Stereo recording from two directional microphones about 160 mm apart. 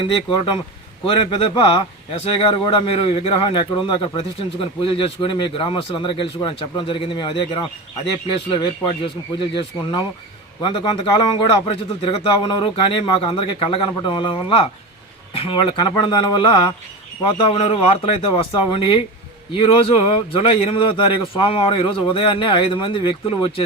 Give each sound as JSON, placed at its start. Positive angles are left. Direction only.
{"t": 0.0, "sound": "a man's voice", "side_deg": 30}